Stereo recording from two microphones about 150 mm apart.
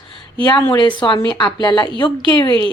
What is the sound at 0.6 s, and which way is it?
A woman's voice, 30° left (ahead or behind).